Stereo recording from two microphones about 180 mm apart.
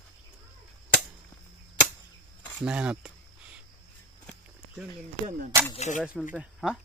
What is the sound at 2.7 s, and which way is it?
Speech, 5° right (ahead or behind).